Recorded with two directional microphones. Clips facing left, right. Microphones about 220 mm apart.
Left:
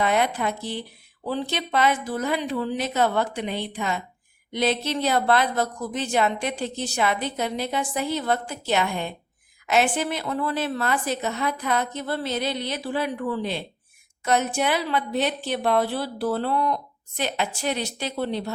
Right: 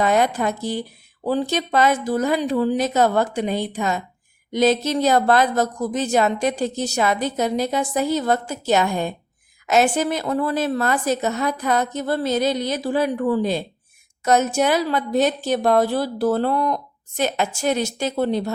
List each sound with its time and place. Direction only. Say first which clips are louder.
0.0 s speech: right 4 dB; 45° right (ahead or behind)